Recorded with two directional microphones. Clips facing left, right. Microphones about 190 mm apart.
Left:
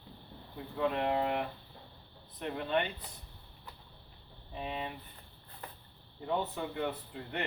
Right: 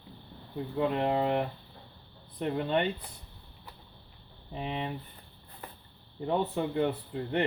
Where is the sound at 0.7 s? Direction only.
25° right (ahead or behind).